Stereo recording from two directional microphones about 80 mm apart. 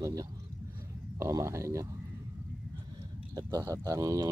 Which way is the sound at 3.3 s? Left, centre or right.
Right.